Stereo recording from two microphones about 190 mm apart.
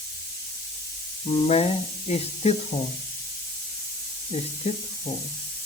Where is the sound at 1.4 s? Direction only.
35° left (ahead or behind).